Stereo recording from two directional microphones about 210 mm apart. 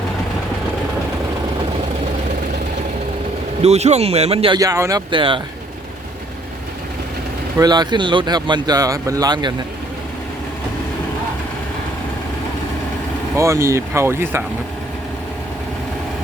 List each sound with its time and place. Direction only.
3.6 s speech: 30° right (ahead or behind)
7.6 s speech: 20° right (ahead or behind)
13.3 s speech: 15° right (ahead or behind)